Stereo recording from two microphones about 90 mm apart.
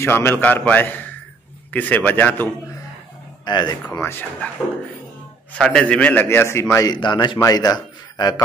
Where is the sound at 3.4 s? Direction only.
55° left (ahead or behind).